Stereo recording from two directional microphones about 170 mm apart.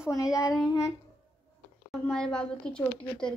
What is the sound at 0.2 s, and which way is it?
Child singing, 20° left (ahead or behind).